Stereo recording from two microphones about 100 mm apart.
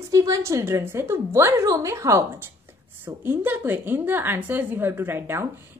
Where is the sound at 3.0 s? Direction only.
20° right (ahead or behind).